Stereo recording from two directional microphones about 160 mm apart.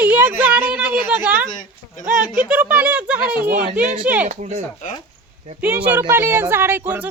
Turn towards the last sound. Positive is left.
turn(degrees=-10)  # may be behind; listen again after turning